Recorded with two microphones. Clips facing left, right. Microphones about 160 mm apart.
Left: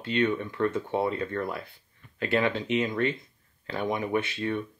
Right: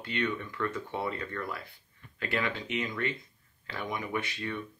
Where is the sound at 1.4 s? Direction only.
25° left (ahead or behind).